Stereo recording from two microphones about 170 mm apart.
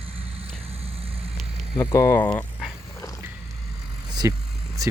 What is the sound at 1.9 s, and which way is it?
Speech, 15° left (ahead or behind).